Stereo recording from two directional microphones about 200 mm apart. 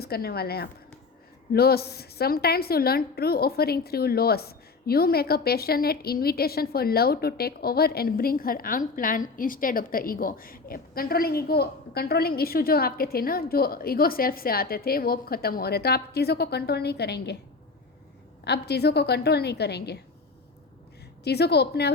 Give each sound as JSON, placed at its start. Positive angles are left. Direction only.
{"t": 0.0, "sound": "a woman's voice", "side_deg": 50}
{"t": 18.4, "sound": "a woman's voice", "side_deg": 55}
{"t": 21.2, "sound": "a woman's voice", "side_deg": 55}